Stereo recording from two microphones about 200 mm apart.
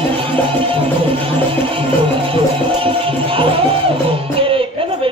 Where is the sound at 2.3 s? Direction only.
25° right (ahead or behind).